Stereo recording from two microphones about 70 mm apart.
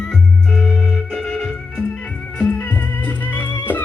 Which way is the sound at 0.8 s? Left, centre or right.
Centre.